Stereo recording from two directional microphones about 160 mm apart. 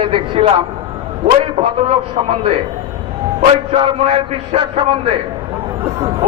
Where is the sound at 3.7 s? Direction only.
40° right (ahead or behind).